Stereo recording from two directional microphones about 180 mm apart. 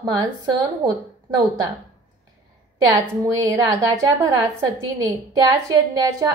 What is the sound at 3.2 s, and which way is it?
A woman's voice, 20° right (ahead or behind).